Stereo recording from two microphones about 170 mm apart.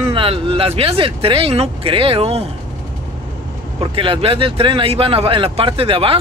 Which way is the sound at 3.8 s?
30° right (ahead or behind).